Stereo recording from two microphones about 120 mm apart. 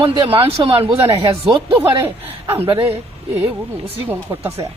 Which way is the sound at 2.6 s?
50° right (ahead or behind).